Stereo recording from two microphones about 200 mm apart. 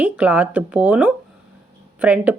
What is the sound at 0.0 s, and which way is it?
Speech, 10° right (ahead or behind).